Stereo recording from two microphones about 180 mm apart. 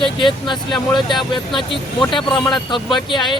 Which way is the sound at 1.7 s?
25° left (ahead or behind).